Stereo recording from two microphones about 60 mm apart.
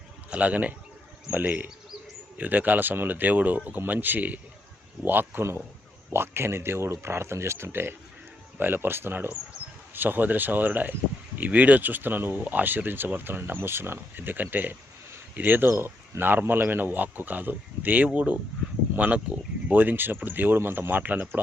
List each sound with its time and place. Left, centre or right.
0.3 s a man's voice: right
19.8 s speech: right